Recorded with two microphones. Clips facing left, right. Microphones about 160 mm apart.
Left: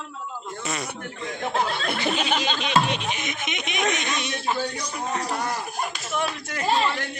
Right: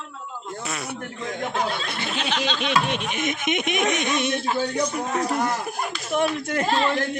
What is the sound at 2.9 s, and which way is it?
A child's voice, 55° right (ahead or behind).